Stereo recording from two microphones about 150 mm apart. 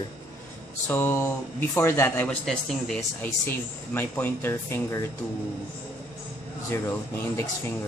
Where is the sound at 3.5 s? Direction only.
15° left (ahead or behind).